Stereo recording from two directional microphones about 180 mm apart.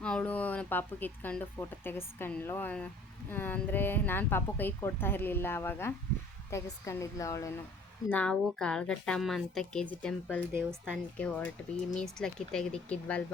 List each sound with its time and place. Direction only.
0.0 s a woman's voice: 5° left (ahead or behind)
8.1 s a woman's voice: 5° left (ahead or behind)